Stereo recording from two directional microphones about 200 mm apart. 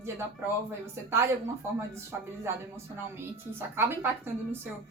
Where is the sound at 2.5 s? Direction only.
10° right (ahead or behind).